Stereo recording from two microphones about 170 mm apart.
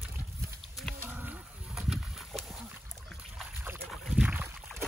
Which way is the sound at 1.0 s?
10° right (ahead or behind).